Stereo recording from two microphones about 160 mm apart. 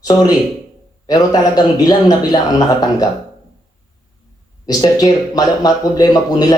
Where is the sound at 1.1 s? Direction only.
25° left (ahead or behind).